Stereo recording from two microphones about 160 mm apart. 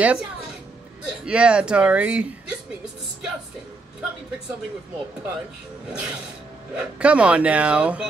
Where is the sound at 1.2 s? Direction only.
5° right (ahead or behind).